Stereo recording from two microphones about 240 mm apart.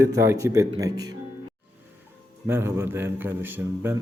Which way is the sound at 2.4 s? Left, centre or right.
Centre.